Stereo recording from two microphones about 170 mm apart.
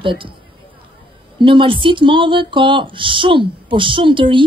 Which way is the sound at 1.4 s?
30° right (ahead or behind).